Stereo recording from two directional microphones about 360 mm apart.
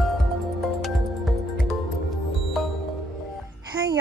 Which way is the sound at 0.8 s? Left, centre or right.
Centre.